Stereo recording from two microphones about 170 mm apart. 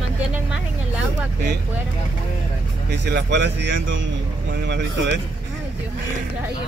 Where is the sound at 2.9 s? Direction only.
85° right.